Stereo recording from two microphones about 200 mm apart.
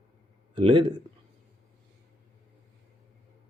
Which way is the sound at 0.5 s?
25° right (ahead or behind).